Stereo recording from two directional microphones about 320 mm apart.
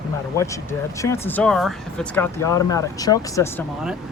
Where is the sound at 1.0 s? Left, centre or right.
Centre.